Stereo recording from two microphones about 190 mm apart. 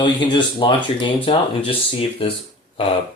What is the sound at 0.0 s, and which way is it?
Speech, 25° left (ahead or behind).